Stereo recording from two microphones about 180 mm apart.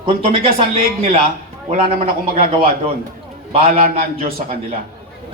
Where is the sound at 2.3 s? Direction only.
30° right (ahead or behind).